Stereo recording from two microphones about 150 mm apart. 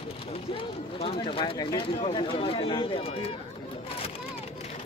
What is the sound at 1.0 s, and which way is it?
Speech, 35° left (ahead or behind).